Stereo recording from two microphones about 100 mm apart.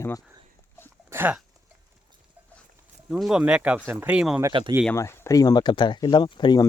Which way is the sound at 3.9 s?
25° right (ahead or behind).